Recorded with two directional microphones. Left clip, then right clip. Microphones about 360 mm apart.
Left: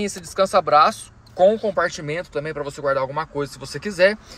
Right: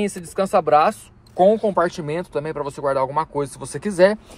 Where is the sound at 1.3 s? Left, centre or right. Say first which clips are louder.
Right 1 dB; right.